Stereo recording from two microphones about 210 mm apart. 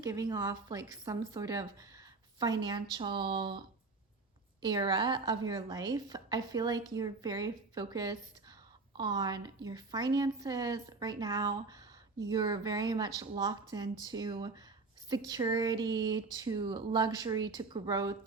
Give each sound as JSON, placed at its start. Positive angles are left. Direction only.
{"t": 0.0, "sound": "a woman's voice", "side_deg": -15}
{"t": 4.6, "sound": "speech", "side_deg": -20}